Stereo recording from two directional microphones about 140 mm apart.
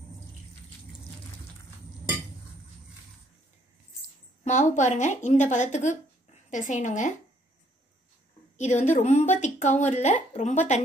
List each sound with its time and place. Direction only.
4.5 s speech: 60° left (ahead or behind)
8.5 s speech: 55° left (ahead or behind)